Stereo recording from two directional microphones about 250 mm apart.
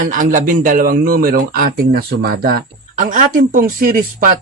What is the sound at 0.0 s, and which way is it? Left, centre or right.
Speech, right.